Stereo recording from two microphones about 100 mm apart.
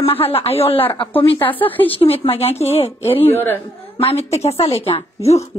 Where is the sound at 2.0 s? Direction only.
75° left (ahead or behind).